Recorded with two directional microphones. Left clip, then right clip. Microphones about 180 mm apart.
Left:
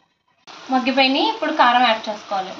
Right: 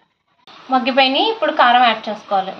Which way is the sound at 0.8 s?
25° right (ahead or behind).